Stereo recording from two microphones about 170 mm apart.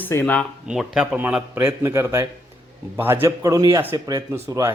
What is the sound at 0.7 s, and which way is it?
Speech, 5° right (ahead or behind).